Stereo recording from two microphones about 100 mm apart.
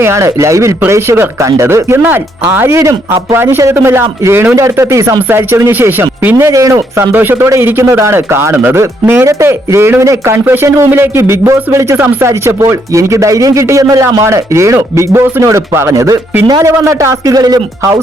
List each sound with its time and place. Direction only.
0.0 s speech: 30° right (ahead or behind)
6.3 s speech: 35° right (ahead or behind)